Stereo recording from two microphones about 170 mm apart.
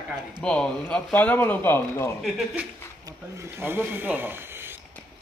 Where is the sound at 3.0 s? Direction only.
15° right (ahead or behind).